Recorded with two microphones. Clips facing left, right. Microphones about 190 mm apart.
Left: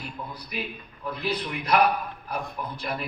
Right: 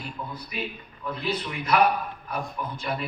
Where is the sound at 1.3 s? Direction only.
35° left (ahead or behind).